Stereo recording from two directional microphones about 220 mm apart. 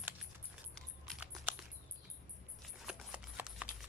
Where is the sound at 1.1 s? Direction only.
5° right (ahead or behind).